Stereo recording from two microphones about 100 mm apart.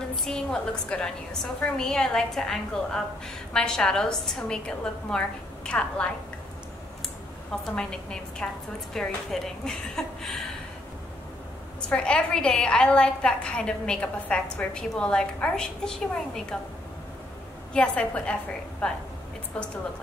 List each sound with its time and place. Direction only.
0.1 s a woman's voice: 5° left (ahead or behind)
7.6 s a woman's voice: 5° left (ahead or behind)
11.9 s a woman's voice: 10° left (ahead or behind)
17.7 s a woman's voice: 10° left (ahead or behind)